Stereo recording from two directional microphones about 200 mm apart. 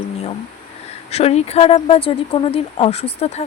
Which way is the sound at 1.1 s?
30° left (ahead or behind).